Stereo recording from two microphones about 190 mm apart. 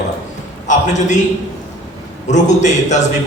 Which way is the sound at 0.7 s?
40° left (ahead or behind).